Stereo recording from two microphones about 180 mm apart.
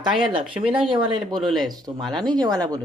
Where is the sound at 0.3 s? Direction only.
30° right (ahead or behind).